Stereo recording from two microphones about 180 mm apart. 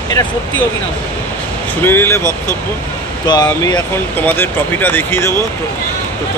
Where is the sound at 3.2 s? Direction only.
25° left (ahead or behind).